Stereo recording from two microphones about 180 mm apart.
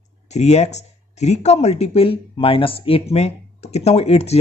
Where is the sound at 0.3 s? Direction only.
40° left (ahead or behind).